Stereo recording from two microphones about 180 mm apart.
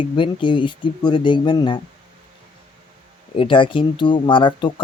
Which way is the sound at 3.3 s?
30° left (ahead or behind).